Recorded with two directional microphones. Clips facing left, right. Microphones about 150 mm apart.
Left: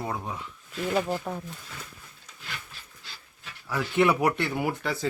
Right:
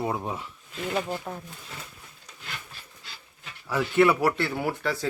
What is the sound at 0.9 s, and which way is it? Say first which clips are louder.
Speech: left 3 dB; 5° left (ahead or behind).